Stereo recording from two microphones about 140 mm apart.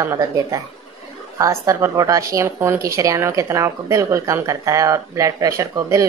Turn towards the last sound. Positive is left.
turn(degrees=-20)  # may be behind; listen again after turning